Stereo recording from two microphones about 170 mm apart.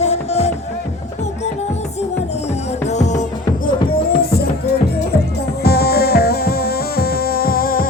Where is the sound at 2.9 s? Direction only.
45° left (ahead or behind).